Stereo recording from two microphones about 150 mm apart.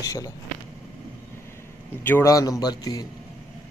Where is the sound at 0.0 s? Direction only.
25° left (ahead or behind).